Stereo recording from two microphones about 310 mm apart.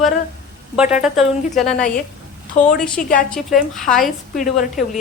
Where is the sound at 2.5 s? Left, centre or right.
Left.